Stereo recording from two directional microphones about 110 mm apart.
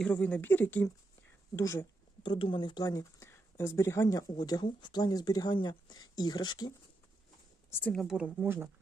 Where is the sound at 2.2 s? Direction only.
50° left (ahead or behind).